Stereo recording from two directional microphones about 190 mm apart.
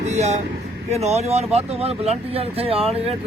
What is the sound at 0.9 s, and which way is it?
Speech, 35° right (ahead or behind).